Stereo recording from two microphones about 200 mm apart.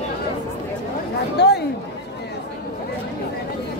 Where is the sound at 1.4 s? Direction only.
55° left (ahead or behind).